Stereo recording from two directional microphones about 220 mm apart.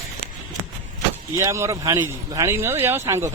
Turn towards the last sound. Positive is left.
turn(degrees=-15)  # may be behind; listen again after turning